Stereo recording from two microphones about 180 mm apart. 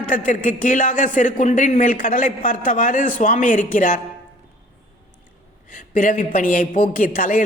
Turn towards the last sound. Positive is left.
turn(degrees=50)  # may be behind; listen again after turning